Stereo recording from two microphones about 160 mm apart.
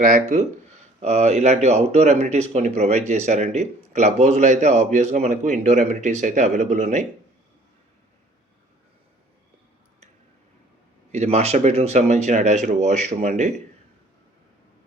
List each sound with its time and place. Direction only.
0.0 s speech: 50° right (ahead or behind)
11.1 s speech: 45° right (ahead or behind)